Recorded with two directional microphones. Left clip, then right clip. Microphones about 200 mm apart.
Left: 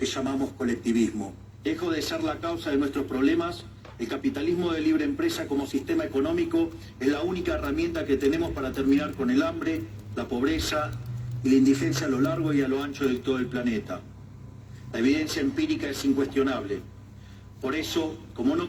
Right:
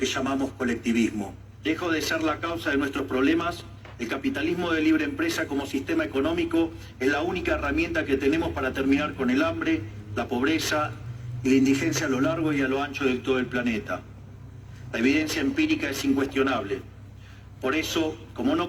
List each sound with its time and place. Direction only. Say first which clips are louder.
0.0 s a man's voice: right 2 dB; 30° right (ahead or behind)